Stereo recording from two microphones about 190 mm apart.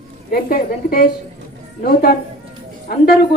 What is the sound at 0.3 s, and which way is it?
A woman's voice, 50° left (ahead or behind).